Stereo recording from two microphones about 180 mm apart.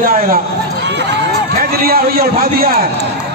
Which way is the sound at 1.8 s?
55° right (ahead or behind).